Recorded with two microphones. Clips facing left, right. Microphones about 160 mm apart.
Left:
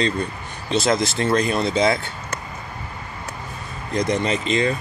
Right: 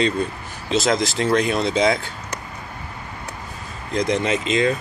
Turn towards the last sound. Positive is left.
turn(degrees=0)  # may be behind; listen again after turning